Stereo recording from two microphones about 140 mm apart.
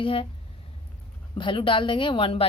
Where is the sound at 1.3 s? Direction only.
35° left (ahead or behind).